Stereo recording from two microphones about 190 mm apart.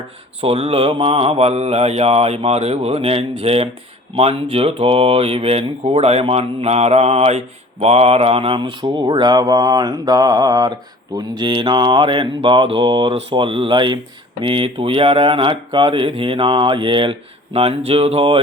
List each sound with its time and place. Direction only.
0.4 s mantra: 30° right (ahead or behind)
4.1 s speech: 30° right (ahead or behind)